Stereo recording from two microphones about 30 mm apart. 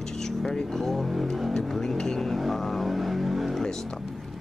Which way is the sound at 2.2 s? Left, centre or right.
Centre.